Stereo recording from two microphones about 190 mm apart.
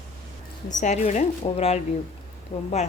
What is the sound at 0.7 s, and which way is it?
A woman's voice, 40° left (ahead or behind).